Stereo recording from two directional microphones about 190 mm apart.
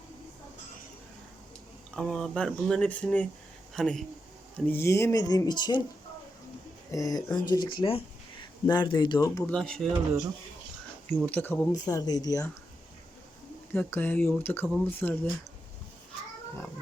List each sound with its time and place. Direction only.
2.0 s speech: 5° left (ahead or behind); by 5.8 s 25° left (ahead or behind)
6.9 s speech: 20° left (ahead or behind)
9.5 s speech: 5° left (ahead or behind)
11.2 s speech: 10° left (ahead or behind)
13.7 s speech: 10° left (ahead or behind)